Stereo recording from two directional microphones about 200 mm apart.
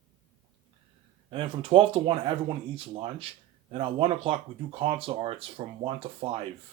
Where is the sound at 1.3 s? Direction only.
25° right (ahead or behind).